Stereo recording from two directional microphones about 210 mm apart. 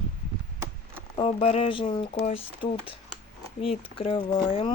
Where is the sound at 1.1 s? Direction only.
25° left (ahead or behind).